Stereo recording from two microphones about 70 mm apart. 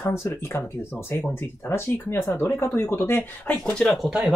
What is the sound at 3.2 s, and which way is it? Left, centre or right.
Speech, left.